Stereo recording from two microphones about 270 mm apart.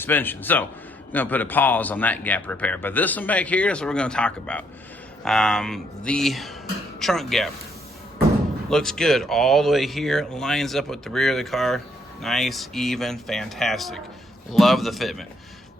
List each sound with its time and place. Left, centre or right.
0.0 s a man's voice: centre
8.7 s a man's voice: centre